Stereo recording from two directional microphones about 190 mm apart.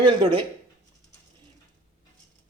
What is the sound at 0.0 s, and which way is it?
Speech, 25° right (ahead or behind).